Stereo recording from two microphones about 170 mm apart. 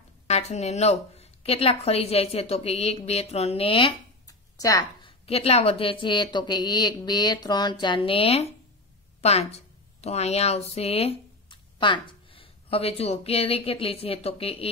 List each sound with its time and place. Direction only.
0.3 s a woman's voice: 40° left (ahead or behind)
4.3 s a sound: 20° left (ahead or behind)
5.2 s a woman's voice: 35° left (ahead or behind)